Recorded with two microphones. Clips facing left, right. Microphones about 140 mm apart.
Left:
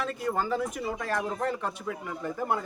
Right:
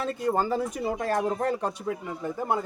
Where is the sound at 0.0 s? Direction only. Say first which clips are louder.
Right 3 dB; 30° right (ahead or behind).